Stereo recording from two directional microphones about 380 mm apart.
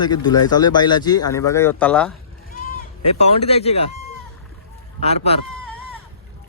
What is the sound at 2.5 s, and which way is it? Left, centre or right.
Bleat, centre.